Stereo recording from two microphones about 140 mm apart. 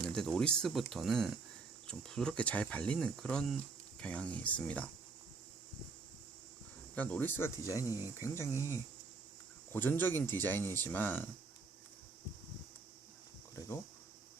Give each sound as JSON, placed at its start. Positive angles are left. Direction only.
{"t": 0.1, "sound": "speech", "side_deg": 5}
{"t": 6.9, "sound": "speech", "side_deg": 10}